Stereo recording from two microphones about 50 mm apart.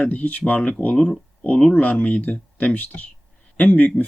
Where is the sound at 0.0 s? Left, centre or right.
Left.